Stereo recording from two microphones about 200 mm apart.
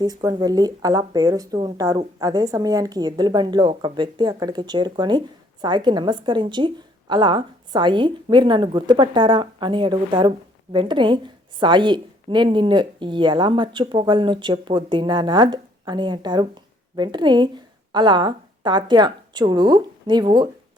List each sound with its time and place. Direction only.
0.0 s a woman's voice: 20° right (ahead or behind)